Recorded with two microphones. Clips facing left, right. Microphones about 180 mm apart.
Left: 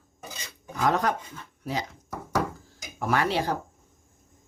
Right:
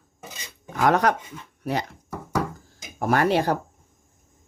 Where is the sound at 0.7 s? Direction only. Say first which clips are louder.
Right 5 dB; 75° right (ahead or behind).